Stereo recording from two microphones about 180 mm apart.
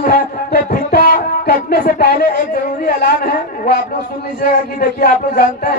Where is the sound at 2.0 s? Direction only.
65° left (ahead or behind).